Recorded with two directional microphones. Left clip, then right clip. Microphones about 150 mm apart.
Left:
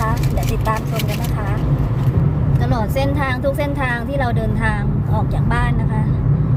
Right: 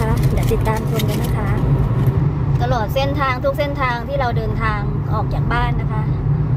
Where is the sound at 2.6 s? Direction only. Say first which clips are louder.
Right 2 dB; centre (ahead or behind).